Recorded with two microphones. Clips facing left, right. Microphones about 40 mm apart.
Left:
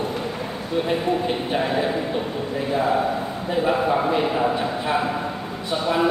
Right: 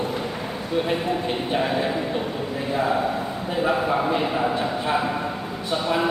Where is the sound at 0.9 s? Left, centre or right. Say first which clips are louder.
Left 2 dB; centre.